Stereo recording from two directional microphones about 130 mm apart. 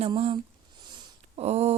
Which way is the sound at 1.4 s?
55° right (ahead or behind).